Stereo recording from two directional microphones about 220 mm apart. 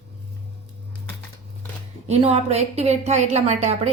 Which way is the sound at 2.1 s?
30° right (ahead or behind).